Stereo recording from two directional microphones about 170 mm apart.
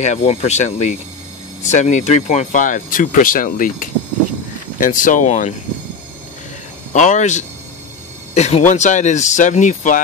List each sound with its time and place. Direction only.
0.0 s speech: 40° left (ahead or behind)
6.9 s speech: 45° left (ahead or behind)